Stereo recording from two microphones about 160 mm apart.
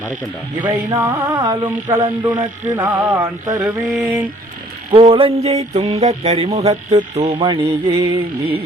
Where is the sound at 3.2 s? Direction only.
25° right (ahead or behind).